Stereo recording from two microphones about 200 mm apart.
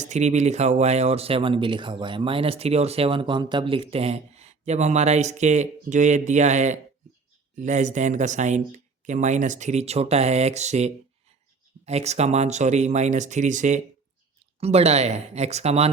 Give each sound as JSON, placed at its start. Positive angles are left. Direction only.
{"t": 0.0, "sound": "speech", "side_deg": -35}